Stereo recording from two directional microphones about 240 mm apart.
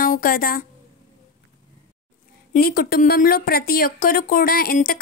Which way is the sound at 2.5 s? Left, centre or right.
Left.